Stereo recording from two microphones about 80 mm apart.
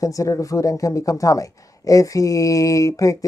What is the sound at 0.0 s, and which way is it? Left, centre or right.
Speech, left.